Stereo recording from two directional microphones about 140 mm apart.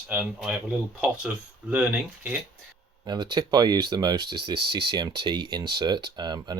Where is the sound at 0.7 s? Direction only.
10° right (ahead or behind).